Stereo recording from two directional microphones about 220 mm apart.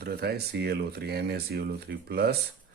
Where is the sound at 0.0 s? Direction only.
45° right (ahead or behind).